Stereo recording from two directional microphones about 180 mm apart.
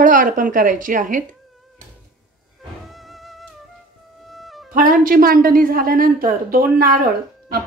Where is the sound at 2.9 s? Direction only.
Centre (ahead or behind).